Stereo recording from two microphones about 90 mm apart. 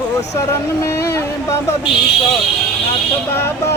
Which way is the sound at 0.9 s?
30° left (ahead or behind).